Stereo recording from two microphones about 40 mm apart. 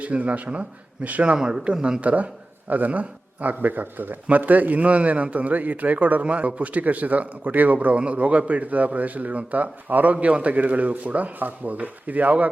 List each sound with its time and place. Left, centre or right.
0.0 s a man's voice: right
1.4 s speech: centre
2.0 s a man's voice: right
7.9 s a man's voice: right